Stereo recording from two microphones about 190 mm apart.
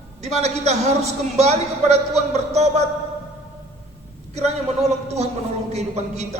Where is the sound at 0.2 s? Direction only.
35° right (ahead or behind).